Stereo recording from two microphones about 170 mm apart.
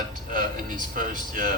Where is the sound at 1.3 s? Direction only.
55° right (ahead or behind).